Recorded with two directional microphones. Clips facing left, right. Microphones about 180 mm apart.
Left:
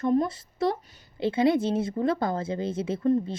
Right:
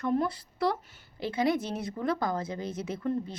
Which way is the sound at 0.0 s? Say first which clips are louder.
Left 4 dB; 20° left (ahead or behind).